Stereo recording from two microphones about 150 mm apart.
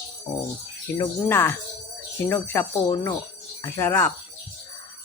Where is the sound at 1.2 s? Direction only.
15° left (ahead or behind).